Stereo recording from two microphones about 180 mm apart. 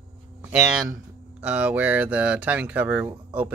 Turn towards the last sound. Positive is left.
turn(degrees=-10)  # may be behind; listen again after turning